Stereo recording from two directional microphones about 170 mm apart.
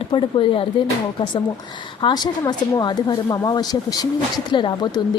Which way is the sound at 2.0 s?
25° left (ahead or behind).